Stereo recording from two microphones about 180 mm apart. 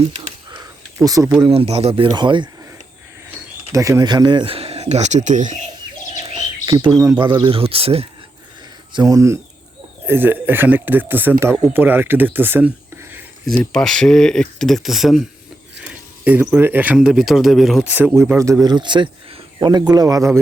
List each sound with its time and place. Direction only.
1.0 s speech: 20° right (ahead or behind)
1.4 s speech: 30° right (ahead or behind)
3.7 s speech: 15° right (ahead or behind); by 5.5 s 45° right (ahead or behind)
6.3 s speech: 25° right (ahead or behind)
7.4 s speech: 30° right (ahead or behind)
8.9 s speech: 20° right (ahead or behind)
13.5 s speech: 5° left (ahead or behind); by 20.4 s 15° right (ahead or behind)